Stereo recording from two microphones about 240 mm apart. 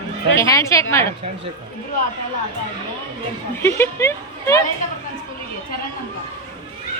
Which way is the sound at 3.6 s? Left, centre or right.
Centre.